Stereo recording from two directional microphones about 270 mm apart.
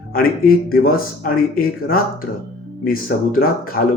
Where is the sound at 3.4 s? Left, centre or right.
Left.